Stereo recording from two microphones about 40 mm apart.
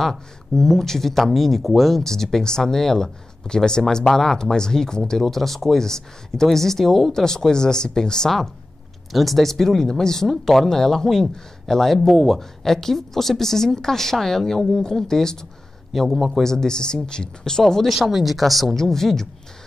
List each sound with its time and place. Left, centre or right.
0.0 s speech: centre
5.2 s speech: centre
9.1 s speech: centre
12.4 s speech: centre
15.9 s speech: centre
16.4 s speech: centre
17.8 s speech: centre